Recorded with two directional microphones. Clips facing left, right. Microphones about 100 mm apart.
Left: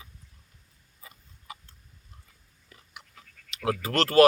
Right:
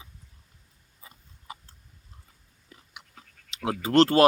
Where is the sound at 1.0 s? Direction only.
35° right (ahead or behind).